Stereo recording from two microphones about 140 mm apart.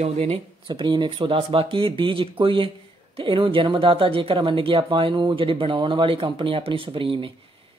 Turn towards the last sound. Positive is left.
turn(degrees=-40)  # may be behind; listen again after turning